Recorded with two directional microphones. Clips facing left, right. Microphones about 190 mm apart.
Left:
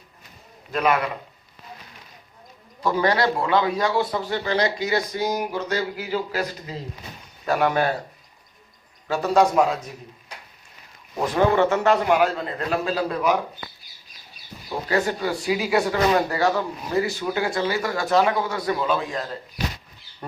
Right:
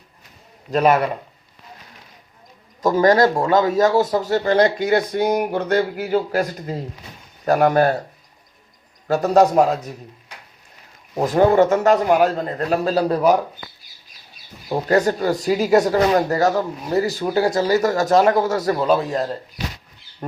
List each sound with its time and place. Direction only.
0.7 s speech: 40° right (ahead or behind)
2.8 s a man's voice: 45° right (ahead or behind)
9.0 s speech: 40° right (ahead or behind)
11.2 s speech: 40° right (ahead or behind)
14.8 s speech: 40° right (ahead or behind)